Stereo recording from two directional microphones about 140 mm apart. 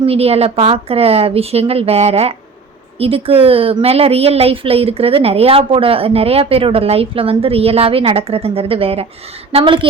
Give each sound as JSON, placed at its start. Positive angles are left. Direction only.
{"t": 0.0, "sound": "a woman's voice", "side_deg": -45}